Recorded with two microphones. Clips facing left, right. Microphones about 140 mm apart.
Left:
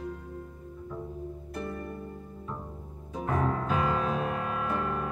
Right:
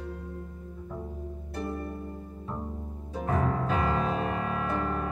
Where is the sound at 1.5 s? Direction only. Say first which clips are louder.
Right 3 dB; 35° right (ahead or behind).